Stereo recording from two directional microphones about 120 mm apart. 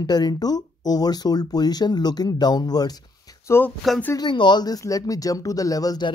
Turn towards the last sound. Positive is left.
turn(degrees=35)  # may be behind; listen again after turning